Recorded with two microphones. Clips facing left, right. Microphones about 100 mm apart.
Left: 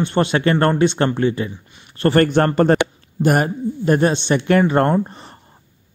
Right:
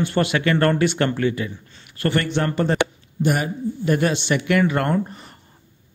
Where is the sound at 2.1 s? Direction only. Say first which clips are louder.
Left 8 dB; 45° left (ahead or behind).